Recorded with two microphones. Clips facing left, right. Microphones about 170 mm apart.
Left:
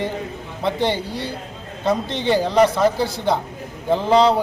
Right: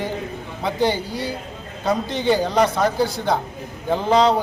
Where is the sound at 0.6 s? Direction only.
Centre (ahead or behind).